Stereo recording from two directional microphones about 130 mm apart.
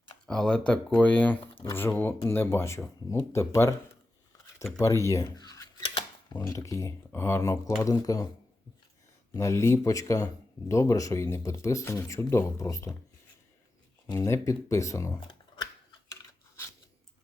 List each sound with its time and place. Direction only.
0.3 s speech: 5° left (ahead or behind)
1.4 s speech: 45° left (ahead or behind)
1.7 s speech: 15° left (ahead or behind)
4.8 s speech: 25° left (ahead or behind)
5.8 s a sound: 40° left (ahead or behind)
6.4 s speech: 25° left (ahead or behind)
9.3 s speech: 25° left (ahead or behind)
14.1 s speech: 20° left (ahead or behind)